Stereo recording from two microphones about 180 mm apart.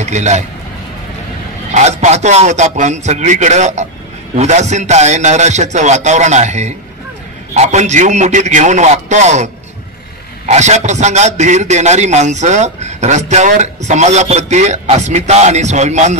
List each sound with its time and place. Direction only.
0.0 s a man's voice: 40° right (ahead or behind)
1.7 s a man's voice: 40° right (ahead or behind)
10.5 s a man's voice: 40° right (ahead or behind)